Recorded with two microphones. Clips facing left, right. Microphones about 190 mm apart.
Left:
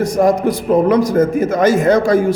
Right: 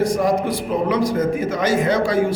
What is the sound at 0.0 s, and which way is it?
A man's voice, 45° left (ahead or behind).